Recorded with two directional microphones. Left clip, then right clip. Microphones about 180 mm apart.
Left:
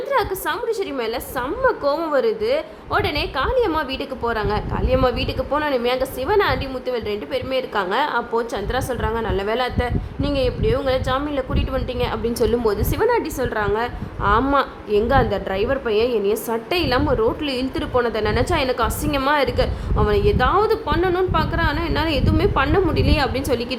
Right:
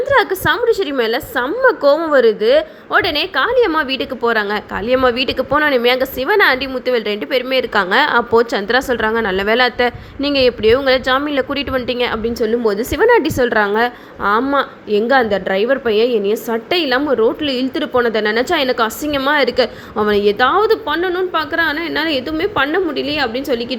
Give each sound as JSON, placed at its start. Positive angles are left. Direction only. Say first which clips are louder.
{"t": 0.1, "sound": "a woman's voice", "louder": "right 7 dB", "side_deg": -25}
{"t": 12.2, "sound": "a woman's voice", "louder": "right 2 dB", "side_deg": -5}
{"t": 12.6, "sound": "a woman's voice", "louder": "right 5 dB", "side_deg": -15}
{"t": 13.1, "sound": "a woman's voice", "louder": "right 9 dB", "side_deg": -30}